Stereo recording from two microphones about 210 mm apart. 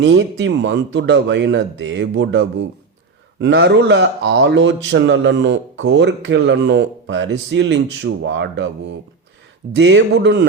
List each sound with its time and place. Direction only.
0.0 s speech: 55° right (ahead or behind)